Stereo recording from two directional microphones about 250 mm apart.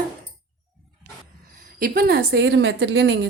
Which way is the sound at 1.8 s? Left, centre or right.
Right.